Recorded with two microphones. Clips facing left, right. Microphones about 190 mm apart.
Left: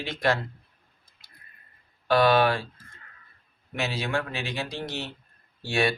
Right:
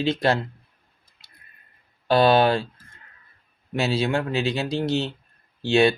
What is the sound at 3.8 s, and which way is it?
Speech, 30° right (ahead or behind).